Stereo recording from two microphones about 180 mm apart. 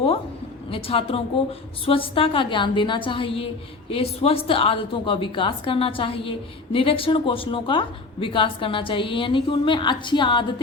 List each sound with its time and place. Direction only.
0.7 s a woman's voice: 30° left (ahead or behind)